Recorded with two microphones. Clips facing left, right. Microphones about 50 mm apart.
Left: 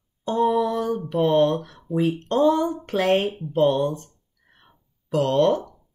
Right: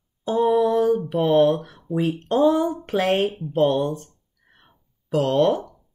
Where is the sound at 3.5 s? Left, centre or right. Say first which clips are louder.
Even; centre.